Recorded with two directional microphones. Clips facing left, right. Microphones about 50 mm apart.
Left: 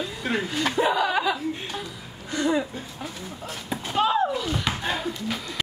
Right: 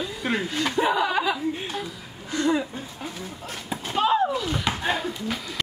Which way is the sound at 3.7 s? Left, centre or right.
Centre.